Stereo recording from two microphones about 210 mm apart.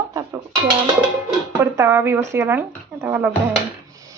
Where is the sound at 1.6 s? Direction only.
10° right (ahead or behind).